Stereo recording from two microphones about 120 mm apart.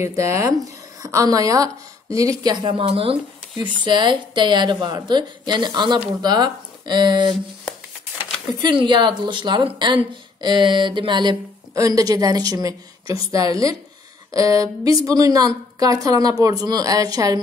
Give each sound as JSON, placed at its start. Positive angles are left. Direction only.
{"t": 0.0, "sound": "a woman's voice", "side_deg": -25}
{"t": 2.9, "sound": "speech", "side_deg": -50}
{"t": 3.6, "sound": "a woman's voice", "side_deg": -40}
{"t": 8.5, "sound": "a woman's voice", "side_deg": -40}
{"t": 11.7, "sound": "a woman's voice", "side_deg": -30}